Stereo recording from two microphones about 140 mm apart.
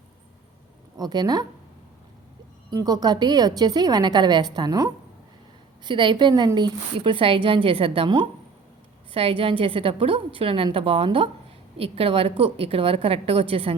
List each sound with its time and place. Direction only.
0.9 s a woman's voice: 30° right (ahead or behind)
2.6 s a woman's voice: 25° right (ahead or behind)